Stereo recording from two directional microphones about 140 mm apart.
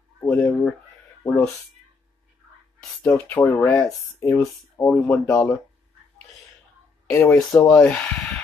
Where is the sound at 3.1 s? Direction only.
10° left (ahead or behind).